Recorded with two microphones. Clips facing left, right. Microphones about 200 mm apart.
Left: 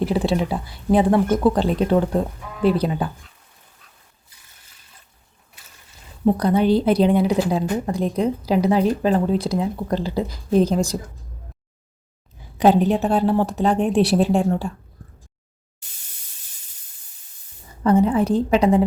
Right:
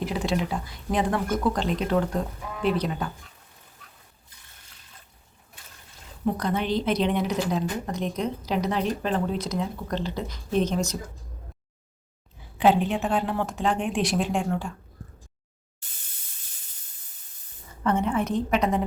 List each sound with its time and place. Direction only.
0.0 s speech: 30° left (ahead or behind)
6.3 s speech: 35° left (ahead or behind)
10.1 s a woman's voice: 5° left (ahead or behind)
10.3 s speech: 35° left (ahead or behind)
12.5 s speech: 40° left (ahead or behind)
17.8 s speech: 35° left (ahead or behind)